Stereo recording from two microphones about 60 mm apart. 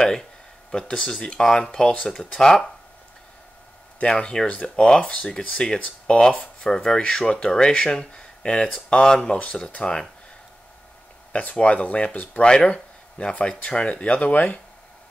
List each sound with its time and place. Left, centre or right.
0.7 s speech: centre
4.0 s speech: centre
11.5 s speech: centre